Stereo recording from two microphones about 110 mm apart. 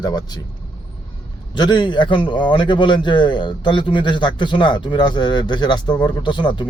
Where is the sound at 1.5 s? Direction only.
45° left (ahead or behind).